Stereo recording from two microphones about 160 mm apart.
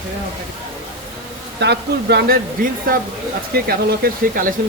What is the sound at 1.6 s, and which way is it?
Speech, 90° right.